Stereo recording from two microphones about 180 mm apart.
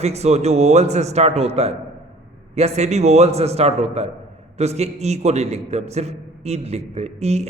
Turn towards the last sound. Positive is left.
turn(degrees=-40)  # may be behind; listen again after turning